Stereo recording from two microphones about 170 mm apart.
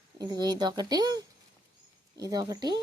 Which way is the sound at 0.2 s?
25° right (ahead or behind).